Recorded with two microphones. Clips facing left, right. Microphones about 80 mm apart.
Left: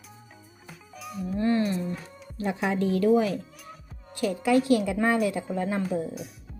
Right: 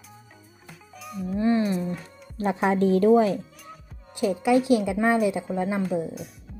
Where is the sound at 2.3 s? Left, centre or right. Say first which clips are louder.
Right 4 dB; right.